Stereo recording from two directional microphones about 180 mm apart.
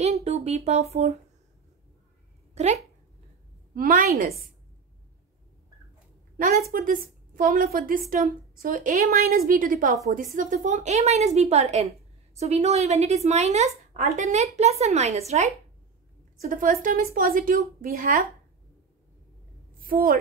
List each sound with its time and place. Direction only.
0.0 s speech: 35° right (ahead or behind)
2.5 s speech: 40° right (ahead or behind)
3.7 s a woman's voice: 50° right (ahead or behind)
6.3 s a woman's voice: 55° right (ahead or behind); by 15.5 s 35° right (ahead or behind)
16.3 s a woman's voice: 50° right (ahead or behind)
19.8 s a woman's voice: 50° right (ahead or behind)